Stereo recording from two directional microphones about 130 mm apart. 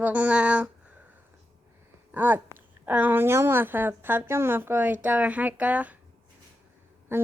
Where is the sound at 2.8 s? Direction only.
15° right (ahead or behind).